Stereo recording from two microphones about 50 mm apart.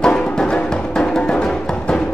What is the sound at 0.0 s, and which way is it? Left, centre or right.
Music, centre.